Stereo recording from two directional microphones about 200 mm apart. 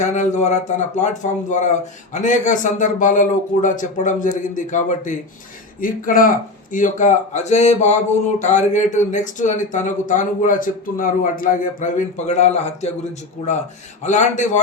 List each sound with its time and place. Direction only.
0.0 s speech: 35° left (ahead or behind)
14.0 s speech: 35° left (ahead or behind)